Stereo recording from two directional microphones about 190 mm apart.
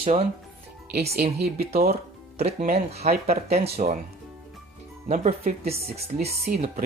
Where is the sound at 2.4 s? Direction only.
35° right (ahead or behind).